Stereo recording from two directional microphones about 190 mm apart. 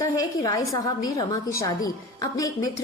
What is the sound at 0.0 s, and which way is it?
A woman's voice, 20° left (ahead or behind).